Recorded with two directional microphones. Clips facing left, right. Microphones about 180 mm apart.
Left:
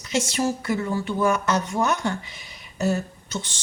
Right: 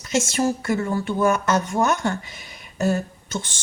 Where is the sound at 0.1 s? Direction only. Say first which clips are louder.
Right 2 dB; 50° right (ahead or behind).